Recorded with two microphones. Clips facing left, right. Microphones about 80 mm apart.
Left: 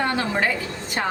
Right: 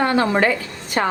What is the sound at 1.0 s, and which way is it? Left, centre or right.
Speech, right.